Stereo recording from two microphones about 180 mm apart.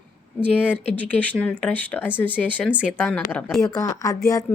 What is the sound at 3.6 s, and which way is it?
Speech, 20° left (ahead or behind).